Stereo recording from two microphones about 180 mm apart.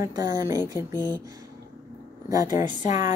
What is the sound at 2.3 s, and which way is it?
Speech, 20° right (ahead or behind).